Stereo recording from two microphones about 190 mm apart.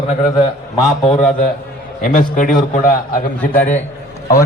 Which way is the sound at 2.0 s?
45° left (ahead or behind).